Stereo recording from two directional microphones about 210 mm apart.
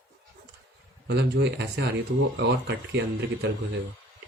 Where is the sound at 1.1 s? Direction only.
55° right (ahead or behind).